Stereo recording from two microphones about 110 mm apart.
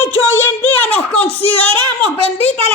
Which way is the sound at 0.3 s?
20° left (ahead or behind).